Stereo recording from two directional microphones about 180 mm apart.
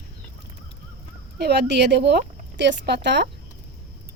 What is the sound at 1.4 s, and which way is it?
Speech, 70° right (ahead or behind).